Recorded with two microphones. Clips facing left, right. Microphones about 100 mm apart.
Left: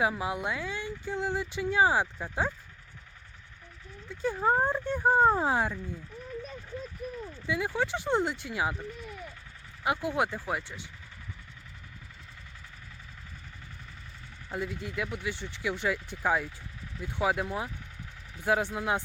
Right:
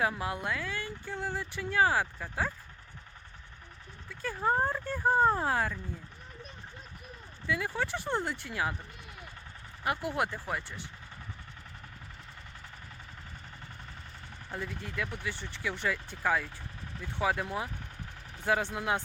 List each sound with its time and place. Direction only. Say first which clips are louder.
0.1 s speech: left 2 dB; 10° left (ahead or behind)
4.1 s speech: left 3 dB; 20° left (ahead or behind)
7.4 s speech: left 2 dB; 15° left (ahead or behind)
9.8 s speech: left 3 dB; 15° left (ahead or behind)
14.5 s speech: left 4 dB; 10° left (ahead or behind)
18.7 s speech: left 1 dB; centre (ahead or behind)